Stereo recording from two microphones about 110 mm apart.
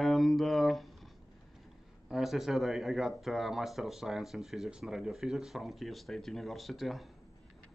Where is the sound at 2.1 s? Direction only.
5° right (ahead or behind).